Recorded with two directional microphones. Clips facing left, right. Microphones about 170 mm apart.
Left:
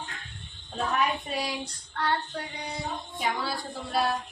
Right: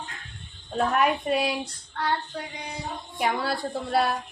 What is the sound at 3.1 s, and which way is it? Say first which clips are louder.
Speech: right 5 dB; 60° right (ahead or behind).